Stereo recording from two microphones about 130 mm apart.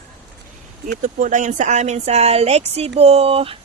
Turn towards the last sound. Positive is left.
turn(degrees=-45)  # may be behind; listen again after turning